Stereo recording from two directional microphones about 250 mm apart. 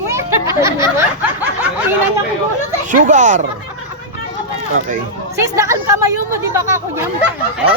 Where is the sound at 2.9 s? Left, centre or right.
Right.